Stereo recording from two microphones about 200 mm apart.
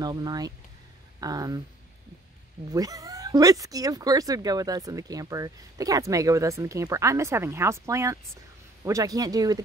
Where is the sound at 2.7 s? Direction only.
15° right (ahead or behind).